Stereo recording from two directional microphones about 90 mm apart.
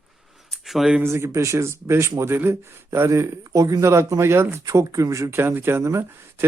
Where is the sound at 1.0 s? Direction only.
30° right (ahead or behind).